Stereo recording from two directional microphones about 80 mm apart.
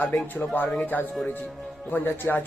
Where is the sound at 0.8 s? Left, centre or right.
Left.